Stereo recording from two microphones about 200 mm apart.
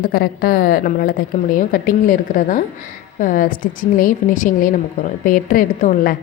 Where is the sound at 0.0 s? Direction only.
50° left (ahead or behind).